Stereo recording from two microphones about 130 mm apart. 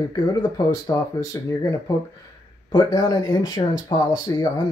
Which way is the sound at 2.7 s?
30° left (ahead or behind).